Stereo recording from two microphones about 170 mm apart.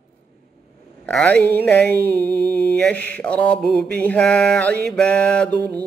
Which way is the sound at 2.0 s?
70° right (ahead or behind).